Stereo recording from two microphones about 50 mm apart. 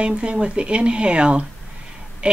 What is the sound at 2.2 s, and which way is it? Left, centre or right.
Quack, right.